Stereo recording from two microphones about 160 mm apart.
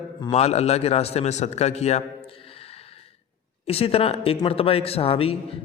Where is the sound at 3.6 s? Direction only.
40° left (ahead or behind).